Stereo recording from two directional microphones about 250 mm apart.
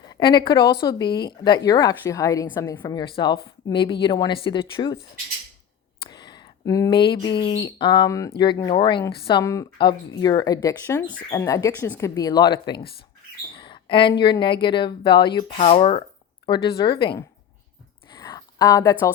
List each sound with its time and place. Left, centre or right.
0.1 s a woman's voice: centre
6.0 s a sound: centre
7.1 s a woman's voice: centre
13.5 s bird: centre
14.1 s speech: centre
18.1 s a sound: centre